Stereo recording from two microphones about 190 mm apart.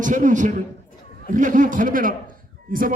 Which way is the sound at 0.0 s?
45° right (ahead or behind).